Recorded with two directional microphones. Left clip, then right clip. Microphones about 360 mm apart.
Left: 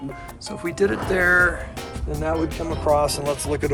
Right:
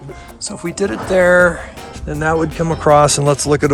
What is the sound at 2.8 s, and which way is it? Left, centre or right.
Speech, right.